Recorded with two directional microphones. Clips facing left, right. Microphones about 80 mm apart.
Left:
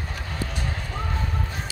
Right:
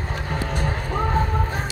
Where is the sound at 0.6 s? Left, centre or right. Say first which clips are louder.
Right 7 dB; right.